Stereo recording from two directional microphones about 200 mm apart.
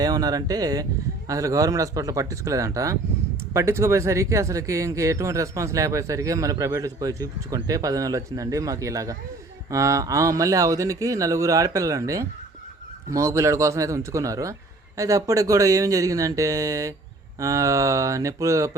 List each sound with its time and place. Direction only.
0.0 s speech: 20° right (ahead or behind)